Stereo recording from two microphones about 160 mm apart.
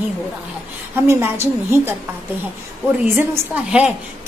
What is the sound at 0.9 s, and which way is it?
A woman's voice, 15° right (ahead or behind).